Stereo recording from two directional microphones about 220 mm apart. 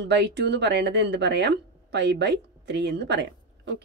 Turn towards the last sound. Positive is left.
turn(degrees=-50)  # may be behind; listen again after turning